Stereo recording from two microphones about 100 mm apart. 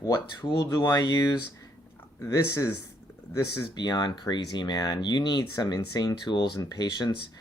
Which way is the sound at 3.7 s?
45° left (ahead or behind).